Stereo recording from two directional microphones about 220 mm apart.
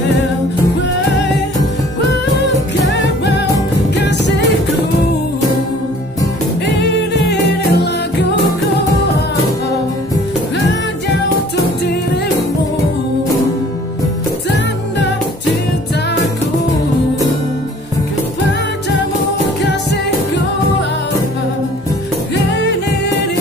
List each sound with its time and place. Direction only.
2.4 s music: 50° left (ahead or behind)
6.8 s music: 50° left (ahead or behind)